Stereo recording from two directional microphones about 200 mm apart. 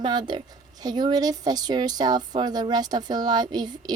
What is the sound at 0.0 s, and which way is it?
Speech, 20° right (ahead or behind).